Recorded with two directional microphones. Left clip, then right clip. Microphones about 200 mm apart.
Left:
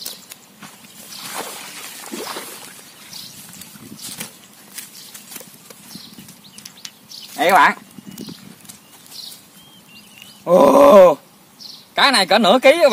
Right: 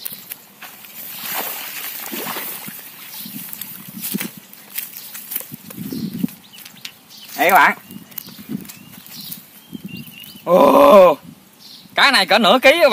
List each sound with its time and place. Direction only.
1.2 s a sound: 40° right (ahead or behind)
7.3 s speech: 30° right (ahead or behind)
10.4 s speech: centre (ahead or behind)